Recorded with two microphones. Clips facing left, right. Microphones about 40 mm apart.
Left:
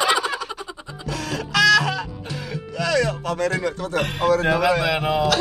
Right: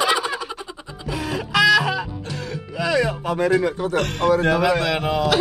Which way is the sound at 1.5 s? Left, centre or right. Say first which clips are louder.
Even; centre.